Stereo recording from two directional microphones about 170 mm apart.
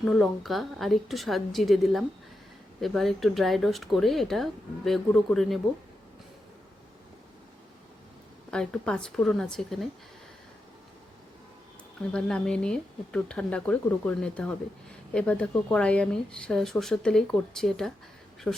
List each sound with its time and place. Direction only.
0.0 s speech: centre (ahead or behind)
8.4 s speech: 5° left (ahead or behind)
12.1 s speech: 5° left (ahead or behind)